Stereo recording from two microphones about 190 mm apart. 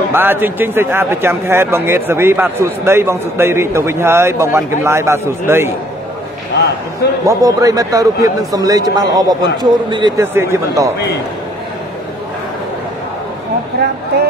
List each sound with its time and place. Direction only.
0.1 s a man's voice: 10° right (ahead or behind)
7.2 s a man's voice: 20° right (ahead or behind)
10.2 s a man's voice: 15° right (ahead or behind)